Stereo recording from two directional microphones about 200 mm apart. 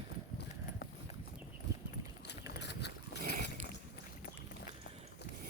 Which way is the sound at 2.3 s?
60° left (ahead or behind).